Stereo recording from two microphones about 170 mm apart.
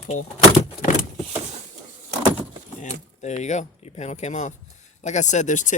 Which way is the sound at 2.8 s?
45° left (ahead or behind).